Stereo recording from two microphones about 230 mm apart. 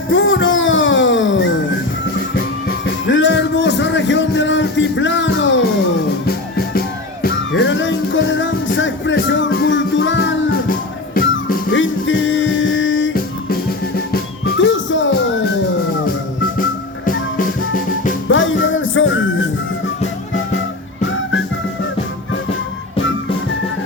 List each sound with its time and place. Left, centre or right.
0.1 s music: left
2.8 s music: left
6.2 s music: left
10.7 s music: left
11.7 s music: left
14.6 s music: left
18.3 s music: left